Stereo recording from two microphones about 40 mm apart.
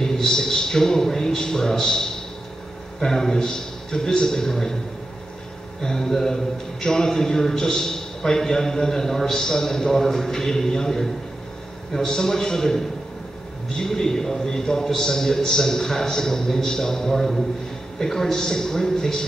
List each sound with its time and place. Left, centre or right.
0.0 s a man's voice: centre
5.8 s a man's voice: centre